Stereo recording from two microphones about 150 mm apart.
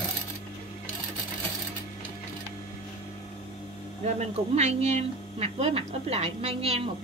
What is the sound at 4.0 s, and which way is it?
A woman's voice, 45° right (ahead or behind).